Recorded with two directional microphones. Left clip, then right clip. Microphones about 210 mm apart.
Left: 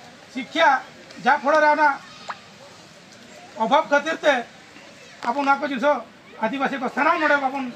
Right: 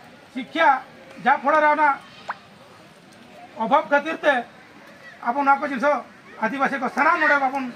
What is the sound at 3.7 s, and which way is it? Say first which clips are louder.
Speech: even; 10° right (ahead or behind).